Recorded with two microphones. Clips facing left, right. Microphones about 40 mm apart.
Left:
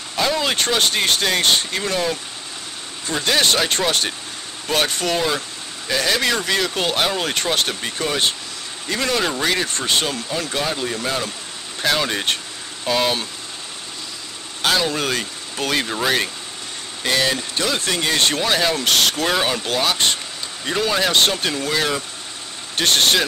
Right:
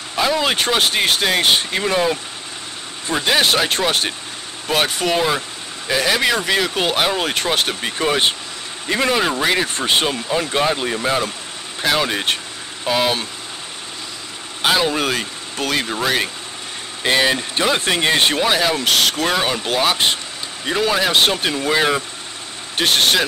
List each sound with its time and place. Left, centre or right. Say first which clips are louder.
0.1 s speech: right 2 dB; centre
8.0 s speech: right 4 dB; right
11.8 s speech: right 2 dB; centre
14.6 s speech: right 2 dB; centre
17.0 s speech: right 3 dB; right
22.8 s speech: right 1 dB; centre